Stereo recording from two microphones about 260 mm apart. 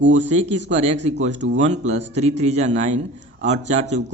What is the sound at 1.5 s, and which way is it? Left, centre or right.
Speech, right.